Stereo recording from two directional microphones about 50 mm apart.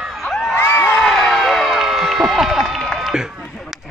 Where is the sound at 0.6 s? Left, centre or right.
Left.